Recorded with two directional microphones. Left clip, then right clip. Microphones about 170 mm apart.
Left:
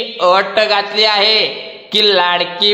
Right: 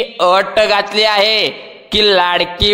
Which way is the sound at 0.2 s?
35° right (ahead or behind).